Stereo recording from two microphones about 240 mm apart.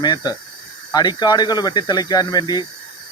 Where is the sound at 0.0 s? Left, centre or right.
Centre.